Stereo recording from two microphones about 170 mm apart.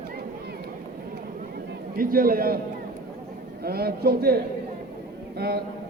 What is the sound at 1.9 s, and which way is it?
Speech, 60° right (ahead or behind).